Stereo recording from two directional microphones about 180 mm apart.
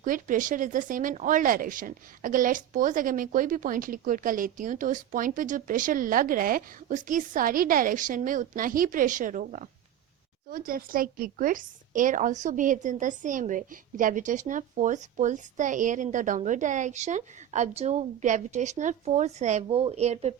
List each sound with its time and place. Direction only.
0.0 s a woman's voice: 50° right (ahead or behind)